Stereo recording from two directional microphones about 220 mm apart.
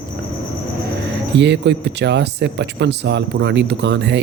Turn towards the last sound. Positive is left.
turn(degrees=-50)  # may be behind; listen again after turning